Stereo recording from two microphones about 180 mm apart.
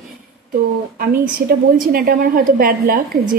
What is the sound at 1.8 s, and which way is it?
A woman's voice, 55° right (ahead or behind).